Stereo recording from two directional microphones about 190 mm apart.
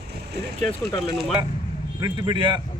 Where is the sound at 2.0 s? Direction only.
20° right (ahead or behind).